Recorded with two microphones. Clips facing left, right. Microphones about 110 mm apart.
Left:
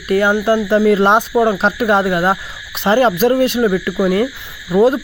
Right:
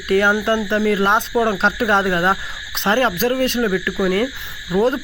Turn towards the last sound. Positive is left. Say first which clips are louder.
# left 5 dB
turn(degrees=15)  # may be behind; listen again after turning